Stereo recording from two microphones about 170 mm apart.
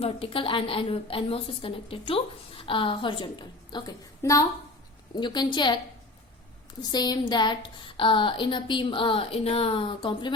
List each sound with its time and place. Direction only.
0.0 s a woman's voice: 30° left (ahead or behind)
6.8 s a woman's voice: 25° left (ahead or behind)